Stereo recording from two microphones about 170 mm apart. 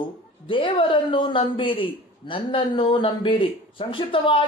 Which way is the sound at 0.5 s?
30° left (ahead or behind).